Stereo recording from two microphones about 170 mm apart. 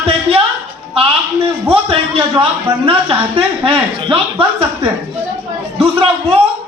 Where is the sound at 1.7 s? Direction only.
35° right (ahead or behind).